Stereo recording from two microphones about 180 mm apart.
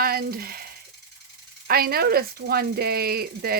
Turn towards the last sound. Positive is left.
turn(degrees=-60)  # may be behind; listen again after turning